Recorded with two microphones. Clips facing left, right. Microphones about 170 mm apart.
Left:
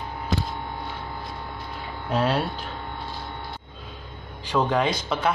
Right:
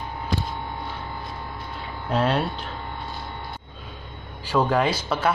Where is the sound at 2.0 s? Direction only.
10° left (ahead or behind).